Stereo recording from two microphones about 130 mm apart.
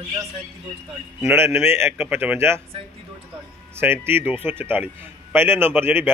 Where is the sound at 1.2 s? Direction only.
20° right (ahead or behind).